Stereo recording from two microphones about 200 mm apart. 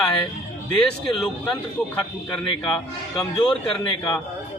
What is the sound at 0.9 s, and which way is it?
Speech, centre (ahead or behind).